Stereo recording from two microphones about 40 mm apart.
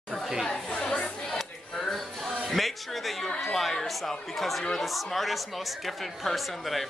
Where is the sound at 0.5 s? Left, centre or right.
Left.